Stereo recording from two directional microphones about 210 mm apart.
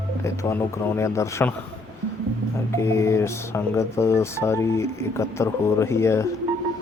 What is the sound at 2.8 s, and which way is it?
Speech, 15° left (ahead or behind).